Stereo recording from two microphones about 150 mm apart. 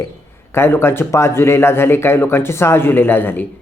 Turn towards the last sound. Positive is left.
turn(degrees=15)  # may be behind; listen again after turning